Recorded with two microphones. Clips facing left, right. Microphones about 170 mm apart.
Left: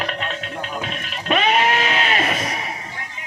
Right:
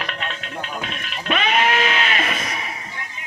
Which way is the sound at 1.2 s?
40° left (ahead or behind).